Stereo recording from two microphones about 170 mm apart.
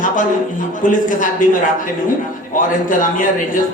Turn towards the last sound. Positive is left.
turn(degrees=50)  # may be behind; listen again after turning